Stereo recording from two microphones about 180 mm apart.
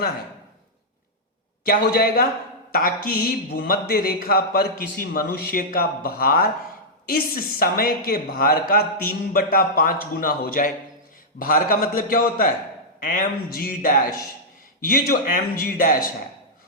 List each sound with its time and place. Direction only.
1.6 s a man's voice: 55° left (ahead or behind)